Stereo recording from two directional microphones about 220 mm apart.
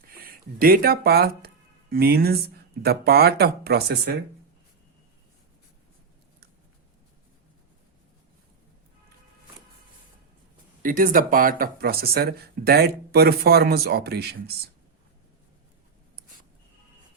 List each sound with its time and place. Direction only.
0.1 s speech: 40° right (ahead or behind)
10.8 s speech: 40° right (ahead or behind)